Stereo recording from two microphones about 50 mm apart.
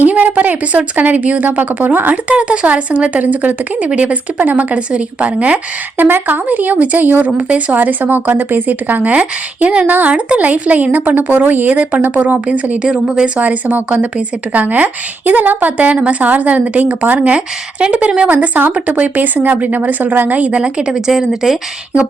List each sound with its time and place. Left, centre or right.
0.0 s a woman's voice: right
2.3 s a woman's voice: right
6.0 s speech: right
7.3 s a woman's voice: right
7.7 s speech: right
9.8 s speech: right
11.8 s a woman's voice: right
13.4 s a woman's voice: right
20.6 s speech: centre